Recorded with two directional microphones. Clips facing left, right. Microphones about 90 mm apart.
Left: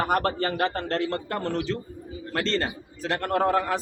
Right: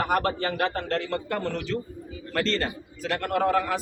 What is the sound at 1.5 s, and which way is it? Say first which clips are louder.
A man's voice: left 1 dB; 25° left (ahead or behind).